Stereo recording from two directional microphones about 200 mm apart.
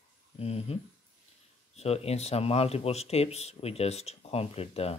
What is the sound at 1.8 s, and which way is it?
Speech, 30° left (ahead or behind).